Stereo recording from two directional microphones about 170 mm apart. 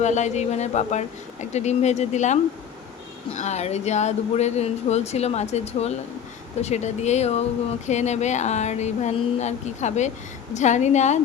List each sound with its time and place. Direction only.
0.0 s speech: 45° left (ahead or behind)